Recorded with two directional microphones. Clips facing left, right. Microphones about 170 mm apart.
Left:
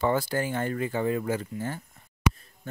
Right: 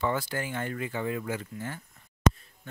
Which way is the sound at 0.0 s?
35° left (ahead or behind).